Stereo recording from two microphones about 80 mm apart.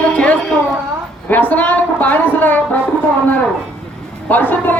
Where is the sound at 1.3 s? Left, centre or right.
Left.